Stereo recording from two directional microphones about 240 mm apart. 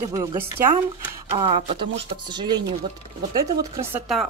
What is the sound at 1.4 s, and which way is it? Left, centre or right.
Speech, right.